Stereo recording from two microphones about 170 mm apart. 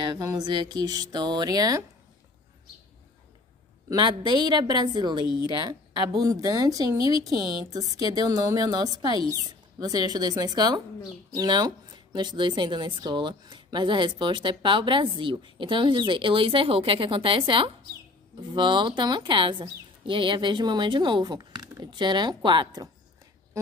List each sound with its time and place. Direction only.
0.0 s speech: 25° right (ahead or behind)
3.9 s speech: 25° right (ahead or behind)